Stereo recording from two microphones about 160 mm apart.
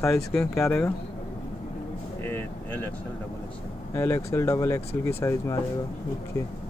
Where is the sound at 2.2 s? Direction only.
15° left (ahead or behind).